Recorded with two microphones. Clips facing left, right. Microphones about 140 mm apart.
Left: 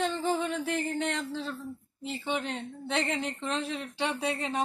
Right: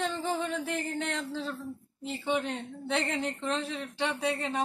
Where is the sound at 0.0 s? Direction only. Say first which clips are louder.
Left 2 dB; centre (ahead or behind).